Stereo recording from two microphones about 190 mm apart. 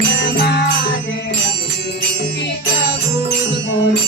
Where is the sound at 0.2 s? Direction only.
65° left (ahead or behind).